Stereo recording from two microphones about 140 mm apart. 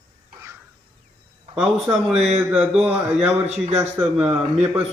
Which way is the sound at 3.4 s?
55° right (ahead or behind).